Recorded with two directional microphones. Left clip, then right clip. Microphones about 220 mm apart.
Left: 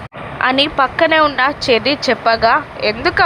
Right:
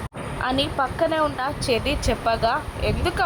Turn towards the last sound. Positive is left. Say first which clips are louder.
# left 9 dB
turn(degrees=15)  # may be behind; listen again after turning